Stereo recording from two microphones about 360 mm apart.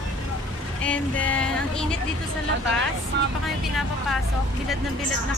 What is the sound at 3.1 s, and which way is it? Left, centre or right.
Speech, right.